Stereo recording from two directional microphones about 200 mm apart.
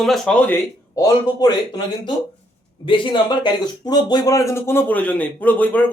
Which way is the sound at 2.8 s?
25° left (ahead or behind).